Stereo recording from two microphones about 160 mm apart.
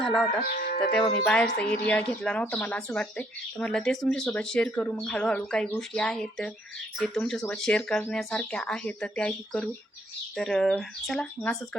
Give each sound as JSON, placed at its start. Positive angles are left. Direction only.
{"t": 0.0, "sound": "speech", "side_deg": 5}
{"t": 0.6, "sound": "speech", "side_deg": 65}
{"t": 1.2, "sound": "a woman's voice", "side_deg": 5}